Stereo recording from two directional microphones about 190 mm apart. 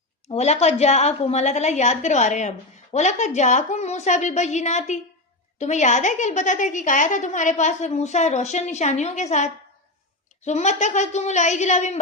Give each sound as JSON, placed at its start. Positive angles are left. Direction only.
{"t": 0.3, "sound": "a woman's voice", "side_deg": 35}